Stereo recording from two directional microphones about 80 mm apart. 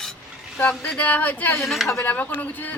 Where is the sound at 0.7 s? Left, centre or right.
Left.